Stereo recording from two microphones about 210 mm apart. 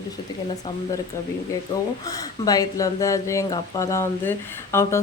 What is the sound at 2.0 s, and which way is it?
Speech, 15° left (ahead or behind).